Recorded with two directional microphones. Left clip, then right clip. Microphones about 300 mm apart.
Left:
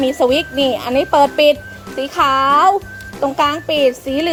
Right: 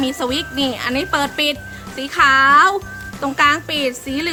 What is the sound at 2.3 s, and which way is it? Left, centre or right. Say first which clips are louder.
Speech: right 2 dB; right.